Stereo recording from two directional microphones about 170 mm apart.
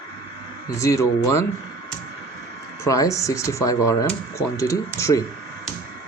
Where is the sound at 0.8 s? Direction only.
20° left (ahead or behind).